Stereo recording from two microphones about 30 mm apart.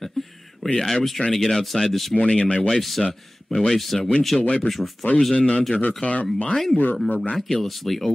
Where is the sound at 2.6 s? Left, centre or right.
Centre.